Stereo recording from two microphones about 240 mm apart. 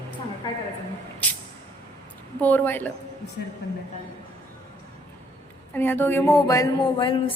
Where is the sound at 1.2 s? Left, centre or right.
Centre.